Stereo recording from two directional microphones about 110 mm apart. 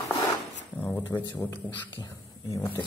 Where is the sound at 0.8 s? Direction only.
15° left (ahead or behind).